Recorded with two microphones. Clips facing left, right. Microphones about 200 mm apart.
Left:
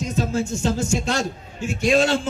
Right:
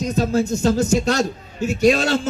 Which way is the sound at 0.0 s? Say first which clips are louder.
Right 4 dB; 35° right (ahead or behind).